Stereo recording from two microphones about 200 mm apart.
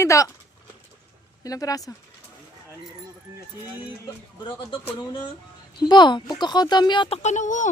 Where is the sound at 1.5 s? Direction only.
15° left (ahead or behind).